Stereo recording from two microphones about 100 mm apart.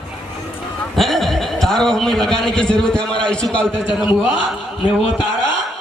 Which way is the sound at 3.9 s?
55° left (ahead or behind).